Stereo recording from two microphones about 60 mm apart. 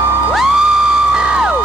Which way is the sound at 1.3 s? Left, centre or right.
Centre.